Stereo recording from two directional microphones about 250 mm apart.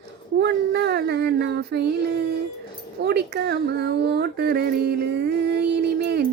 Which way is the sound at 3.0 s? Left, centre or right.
Right.